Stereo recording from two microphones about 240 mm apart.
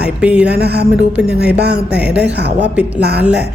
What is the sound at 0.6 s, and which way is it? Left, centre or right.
Speech, right.